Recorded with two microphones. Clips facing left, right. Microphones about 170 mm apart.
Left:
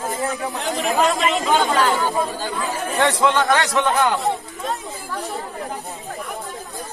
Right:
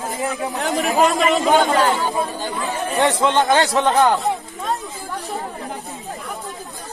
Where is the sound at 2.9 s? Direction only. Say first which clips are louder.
Right 1 dB; 20° right (ahead or behind).